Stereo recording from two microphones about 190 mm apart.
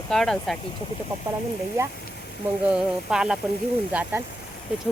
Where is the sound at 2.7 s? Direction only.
5° right (ahead or behind).